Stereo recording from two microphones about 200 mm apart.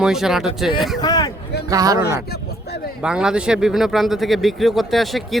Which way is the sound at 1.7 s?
20° right (ahead or behind).